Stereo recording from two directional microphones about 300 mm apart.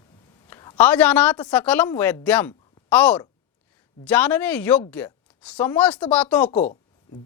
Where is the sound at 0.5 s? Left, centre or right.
Centre.